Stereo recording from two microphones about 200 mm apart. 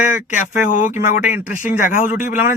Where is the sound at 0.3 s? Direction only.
40° left (ahead or behind).